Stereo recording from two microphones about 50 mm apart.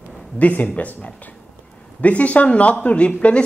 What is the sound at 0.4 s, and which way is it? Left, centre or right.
A man's voice, left.